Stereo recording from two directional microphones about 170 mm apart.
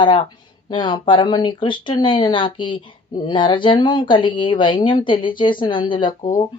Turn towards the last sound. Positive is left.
turn(degrees=30)  # may be behind; listen again after turning